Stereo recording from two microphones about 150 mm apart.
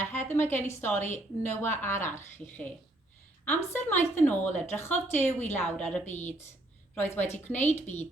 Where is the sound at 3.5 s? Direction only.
15° left (ahead or behind).